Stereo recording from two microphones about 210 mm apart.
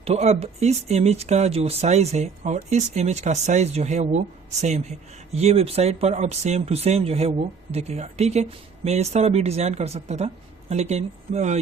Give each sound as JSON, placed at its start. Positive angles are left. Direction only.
{"t": 0.0, "sound": "speech", "side_deg": -30}